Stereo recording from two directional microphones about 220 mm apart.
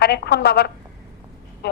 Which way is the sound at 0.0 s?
50° left (ahead or behind).